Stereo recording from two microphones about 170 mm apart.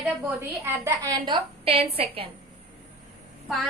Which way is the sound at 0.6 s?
15° right (ahead or behind).